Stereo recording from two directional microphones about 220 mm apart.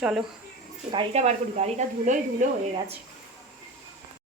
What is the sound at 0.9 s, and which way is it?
Speech, 25° right (ahead or behind).